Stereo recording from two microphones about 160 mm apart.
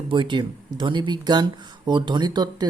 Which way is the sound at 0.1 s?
30° right (ahead or behind).